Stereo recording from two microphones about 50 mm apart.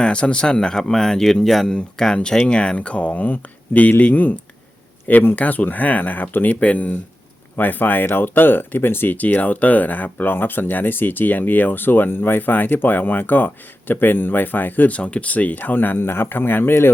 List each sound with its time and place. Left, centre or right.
0.0 s speech: left
7.5 s speech: left